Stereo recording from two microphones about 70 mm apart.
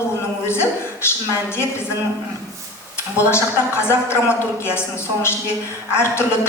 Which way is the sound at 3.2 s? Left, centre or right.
Left.